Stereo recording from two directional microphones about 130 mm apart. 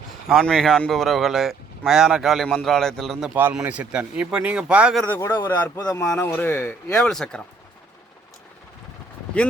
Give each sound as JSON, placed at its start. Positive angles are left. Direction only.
{"t": 0.3, "sound": "a man's voice", "side_deg": 0}
{"t": 3.3, "sound": "speech", "side_deg": -15}
{"t": 5.0, "sound": "speech", "side_deg": 15}
{"t": 5.8, "sound": "speech", "side_deg": 25}
{"t": 6.1, "sound": "speech", "side_deg": 15}
{"t": 6.9, "sound": "a man's voice", "side_deg": 5}